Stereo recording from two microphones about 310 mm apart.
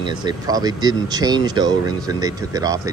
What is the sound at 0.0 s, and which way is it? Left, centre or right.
Speech, centre.